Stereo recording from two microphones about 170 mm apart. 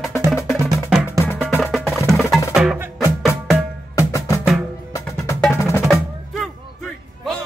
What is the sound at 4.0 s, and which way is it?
Music, 20° left (ahead or behind).